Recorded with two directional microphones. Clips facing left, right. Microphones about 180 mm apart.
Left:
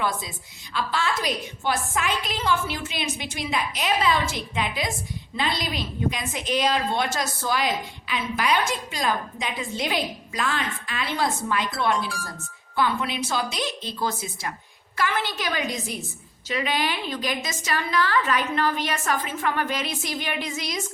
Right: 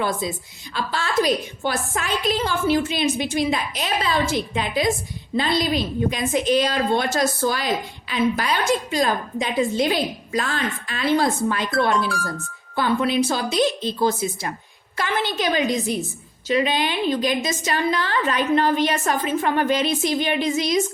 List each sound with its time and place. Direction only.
0.0 s a woman's voice: 35° right (ahead or behind)
11.9 s speech: 65° right (ahead or behind)
12.7 s a woman's voice: 35° right (ahead or behind)